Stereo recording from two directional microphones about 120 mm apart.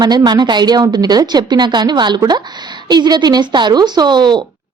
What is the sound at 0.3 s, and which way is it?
A woman's voice, 35° right (ahead or behind).